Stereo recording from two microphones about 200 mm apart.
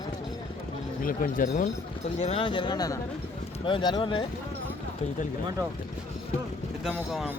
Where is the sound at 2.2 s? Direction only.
30° left (ahead or behind).